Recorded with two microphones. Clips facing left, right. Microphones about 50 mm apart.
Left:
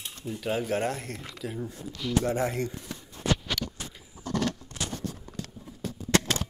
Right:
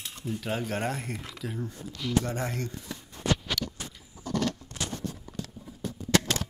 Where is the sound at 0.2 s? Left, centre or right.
Centre.